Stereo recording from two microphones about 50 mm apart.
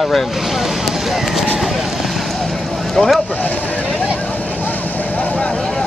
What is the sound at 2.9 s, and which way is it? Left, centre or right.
Speech, centre.